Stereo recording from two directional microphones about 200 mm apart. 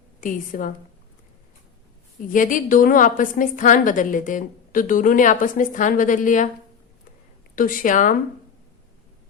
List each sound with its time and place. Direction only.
0.2 s a woman's voice: 40° left (ahead or behind)
2.3 s a woman's voice: 40° left (ahead or behind)
7.5 s speech: 45° left (ahead or behind)